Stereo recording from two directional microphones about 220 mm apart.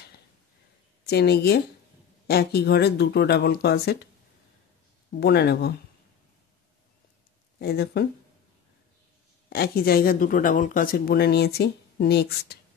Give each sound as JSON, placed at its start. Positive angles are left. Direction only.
{"t": 1.0, "sound": "speech", "side_deg": 50}
{"t": 5.1, "sound": "speech", "side_deg": 45}
{"t": 7.5, "sound": "speech", "side_deg": 45}
{"t": 9.5, "sound": "speech", "side_deg": 45}